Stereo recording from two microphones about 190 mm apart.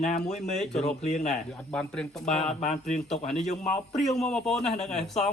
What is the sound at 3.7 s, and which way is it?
A man's voice, centre (ahead or behind).